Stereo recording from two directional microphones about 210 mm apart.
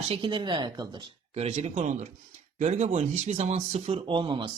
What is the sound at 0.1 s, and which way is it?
Speech, 25° right (ahead or behind).